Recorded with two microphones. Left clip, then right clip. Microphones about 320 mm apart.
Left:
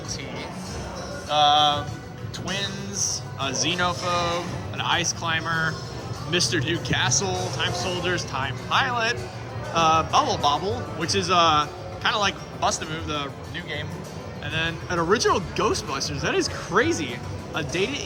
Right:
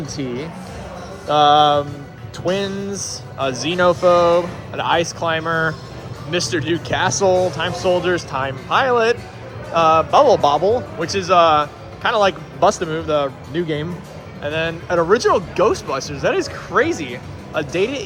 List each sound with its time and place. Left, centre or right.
1.3 s speech: centre